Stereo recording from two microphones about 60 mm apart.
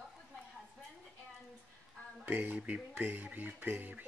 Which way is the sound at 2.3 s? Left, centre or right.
Right.